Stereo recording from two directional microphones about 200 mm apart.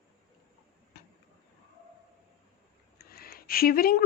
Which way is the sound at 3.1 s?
50° left (ahead or behind).